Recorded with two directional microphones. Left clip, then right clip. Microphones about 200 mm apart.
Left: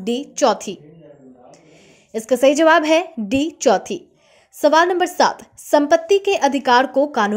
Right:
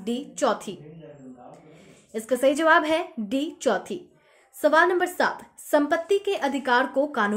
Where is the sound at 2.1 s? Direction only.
30° left (ahead or behind).